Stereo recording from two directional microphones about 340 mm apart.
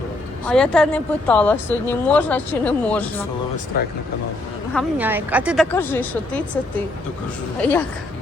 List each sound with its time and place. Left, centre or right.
0.4 s speech: centre
3.7 s speech: left
4.7 s speech: centre